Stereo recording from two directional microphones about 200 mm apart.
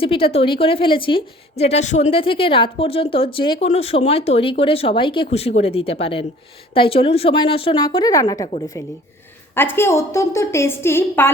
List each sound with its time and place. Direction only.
0.0 s a woman's voice: 25° left (ahead or behind); by 11.3 s 10° left (ahead or behind)